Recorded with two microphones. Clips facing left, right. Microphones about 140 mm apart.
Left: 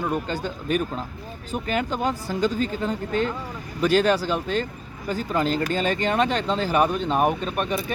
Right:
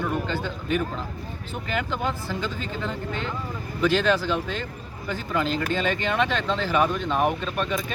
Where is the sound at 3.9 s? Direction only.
10° left (ahead or behind).